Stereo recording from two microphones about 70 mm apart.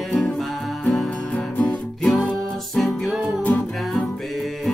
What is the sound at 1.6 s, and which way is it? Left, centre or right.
Music, centre.